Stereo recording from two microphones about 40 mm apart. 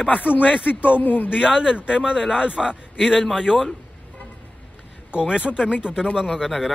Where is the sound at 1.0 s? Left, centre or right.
Left.